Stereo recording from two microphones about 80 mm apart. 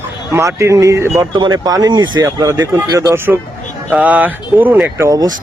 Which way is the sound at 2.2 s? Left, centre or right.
Right.